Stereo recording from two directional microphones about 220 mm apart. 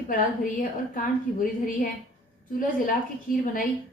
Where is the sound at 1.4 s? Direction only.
40° left (ahead or behind).